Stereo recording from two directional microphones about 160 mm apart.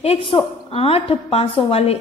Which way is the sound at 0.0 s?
35° left (ahead or behind).